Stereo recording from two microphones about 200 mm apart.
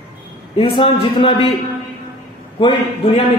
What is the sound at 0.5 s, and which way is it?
Speech, 25° left (ahead or behind).